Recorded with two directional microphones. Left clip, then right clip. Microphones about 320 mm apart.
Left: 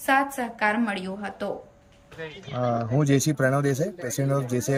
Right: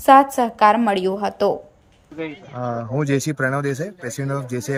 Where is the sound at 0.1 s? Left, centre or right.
Centre.